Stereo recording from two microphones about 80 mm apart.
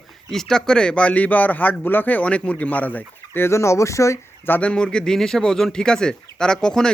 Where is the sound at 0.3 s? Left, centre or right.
Centre; by 4.2 s left.